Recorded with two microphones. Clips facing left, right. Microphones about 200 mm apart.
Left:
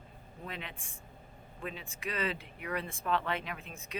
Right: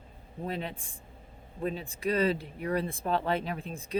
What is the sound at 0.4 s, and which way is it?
Speech, 35° right (ahead or behind).